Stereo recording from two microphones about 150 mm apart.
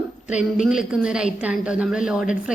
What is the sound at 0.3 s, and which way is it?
A woman's voice, 5° right (ahead or behind).